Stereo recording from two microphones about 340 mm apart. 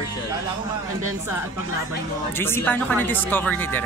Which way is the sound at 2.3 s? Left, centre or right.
Centre.